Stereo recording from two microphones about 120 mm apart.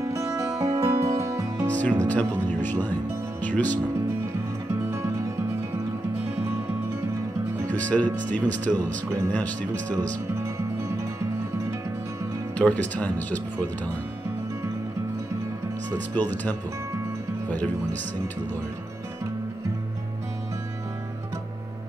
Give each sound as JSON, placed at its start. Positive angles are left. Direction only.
{"t": 0.0, "sound": "music", "side_deg": -25}
{"t": 1.8, "sound": "speech", "side_deg": 10}
{"t": 7.7, "sound": "speech", "side_deg": 10}
{"t": 12.5, "sound": "speech", "side_deg": 10}
{"t": 16.2, "sound": "speech", "side_deg": 15}